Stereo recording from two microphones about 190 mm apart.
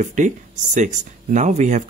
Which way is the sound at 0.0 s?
40° right (ahead or behind).